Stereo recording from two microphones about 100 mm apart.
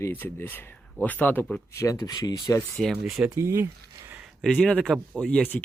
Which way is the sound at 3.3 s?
30° right (ahead or behind).